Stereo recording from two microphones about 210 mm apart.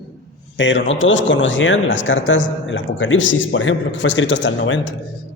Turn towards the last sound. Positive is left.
turn(degrees=60)  # may be behind; listen again after turning